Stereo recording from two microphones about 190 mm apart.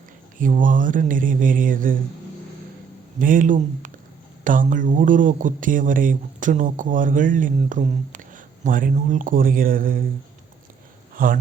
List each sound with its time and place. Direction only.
0.3 s speech: 45° right (ahead or behind)
3.2 s speech: 45° right (ahead or behind)
11.1 s a sound: 45° right (ahead or behind)